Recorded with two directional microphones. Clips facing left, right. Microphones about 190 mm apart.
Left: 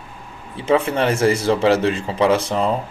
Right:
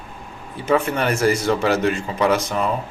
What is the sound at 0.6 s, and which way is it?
Speech, 30° left (ahead or behind).